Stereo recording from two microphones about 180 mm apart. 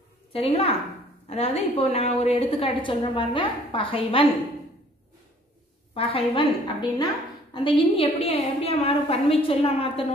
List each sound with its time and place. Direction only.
0.3 s a woman's voice: 30° left (ahead or behind)
5.9 s a woman's voice: 30° left (ahead or behind)